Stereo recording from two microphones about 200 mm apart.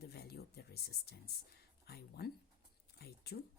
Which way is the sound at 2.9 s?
55° left (ahead or behind).